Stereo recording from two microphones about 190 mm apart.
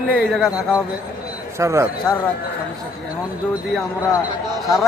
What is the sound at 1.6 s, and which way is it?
Speech, 15° right (ahead or behind).